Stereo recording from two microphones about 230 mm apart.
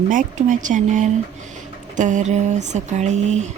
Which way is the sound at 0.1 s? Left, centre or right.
Right.